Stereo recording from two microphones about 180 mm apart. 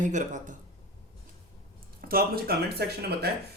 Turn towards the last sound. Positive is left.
turn(degrees=-60)  # may be behind; listen again after turning